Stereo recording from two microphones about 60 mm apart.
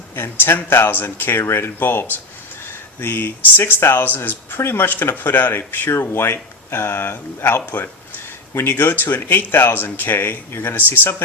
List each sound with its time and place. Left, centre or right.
0.2 s speech: left